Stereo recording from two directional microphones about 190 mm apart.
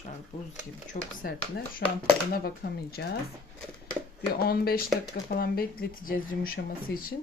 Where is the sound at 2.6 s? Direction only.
50° left (ahead or behind).